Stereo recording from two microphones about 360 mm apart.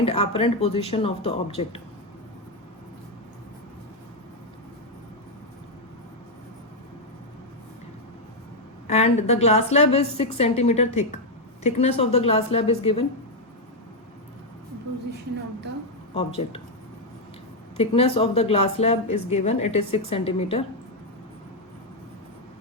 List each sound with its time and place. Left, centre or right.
0.0 s a woman's voice: centre
8.9 s a woman's voice: centre
17.7 s a woman's voice: centre